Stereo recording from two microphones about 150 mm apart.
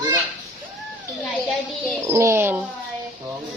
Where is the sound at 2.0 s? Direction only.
20° right (ahead or behind).